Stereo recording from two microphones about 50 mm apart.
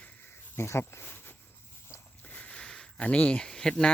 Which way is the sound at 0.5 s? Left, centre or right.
Left.